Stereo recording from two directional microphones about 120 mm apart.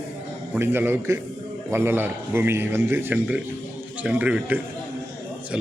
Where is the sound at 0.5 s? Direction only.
20° right (ahead or behind).